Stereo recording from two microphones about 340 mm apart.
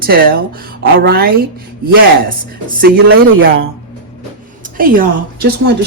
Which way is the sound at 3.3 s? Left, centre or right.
Right.